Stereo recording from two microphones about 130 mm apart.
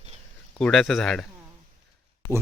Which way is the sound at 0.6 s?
5° left (ahead or behind).